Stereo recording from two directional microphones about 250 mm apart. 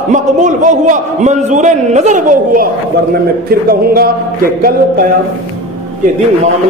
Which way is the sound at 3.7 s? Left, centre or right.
Right.